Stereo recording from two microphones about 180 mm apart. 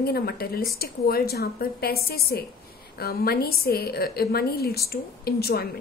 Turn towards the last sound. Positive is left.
turn(degrees=60)  # may be behind; listen again after turning